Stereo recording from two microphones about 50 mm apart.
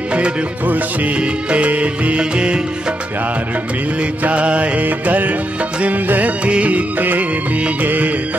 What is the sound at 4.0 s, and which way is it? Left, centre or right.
Music, right.